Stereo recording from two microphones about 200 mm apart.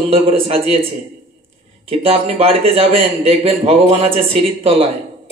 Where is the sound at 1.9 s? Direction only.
30° right (ahead or behind).